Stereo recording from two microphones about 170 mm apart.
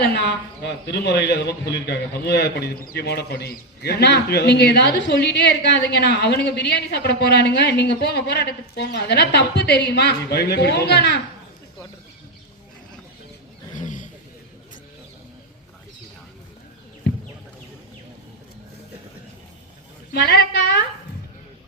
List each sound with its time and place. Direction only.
0.0 s a sound: 80° left
0.9 s a man's voice: 75° left (ahead or behind)
13.7 s vehicle: 50° left (ahead or behind)
20.1 s a man's voice: 75° left (ahead or behind)